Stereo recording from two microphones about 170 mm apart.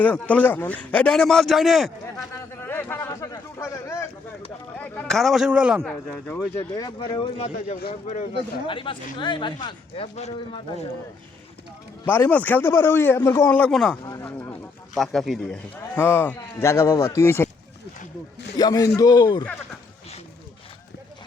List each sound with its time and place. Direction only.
0.0 s a man's voice: 10° left (ahead or behind)
2.3 s a sound: 10° left (ahead or behind)
4.8 s speech: 5° left (ahead or behind)
5.9 s a man's voice: 10° left (ahead or behind)
6.6 s speech: 25° left (ahead or behind)
7.8 s speech: 55° left (ahead or behind)
8.3 s speech: 30° left (ahead or behind)
12.0 s a man's voice: 10° left (ahead or behind)
14.0 s a man's voice: 20° left (ahead or behind)
14.9 s speech: centre (ahead or behind)
16.0 s a man's voice: 10° left (ahead or behind)
18.5 s speech: 20° left (ahead or behind)